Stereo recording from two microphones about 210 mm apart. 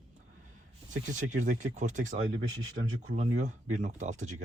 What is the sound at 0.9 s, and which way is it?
Speech, 35° right (ahead or behind).